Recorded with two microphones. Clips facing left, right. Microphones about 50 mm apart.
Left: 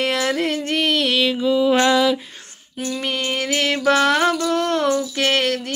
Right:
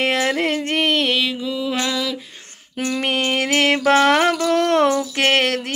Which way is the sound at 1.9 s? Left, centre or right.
Left.